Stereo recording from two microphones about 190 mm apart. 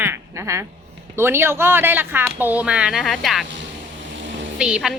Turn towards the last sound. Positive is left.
turn(degrees=-5)  # may be behind; listen again after turning